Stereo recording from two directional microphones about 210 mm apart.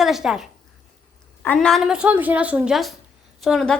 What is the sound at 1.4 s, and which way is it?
A woman's voice, centre (ahead or behind).